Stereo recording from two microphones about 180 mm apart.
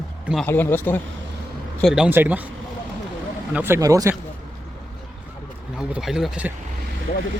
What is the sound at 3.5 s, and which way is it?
Speech, 10° right (ahead or behind).